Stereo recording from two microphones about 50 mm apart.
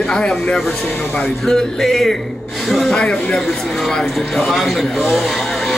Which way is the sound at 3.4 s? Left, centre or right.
Centre.